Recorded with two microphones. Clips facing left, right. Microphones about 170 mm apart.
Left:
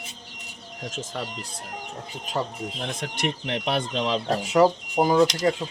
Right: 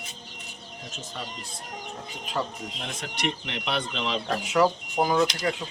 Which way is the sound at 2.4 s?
35° left (ahead or behind).